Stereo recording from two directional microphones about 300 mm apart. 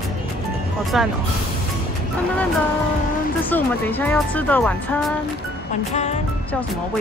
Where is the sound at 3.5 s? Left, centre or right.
Centre.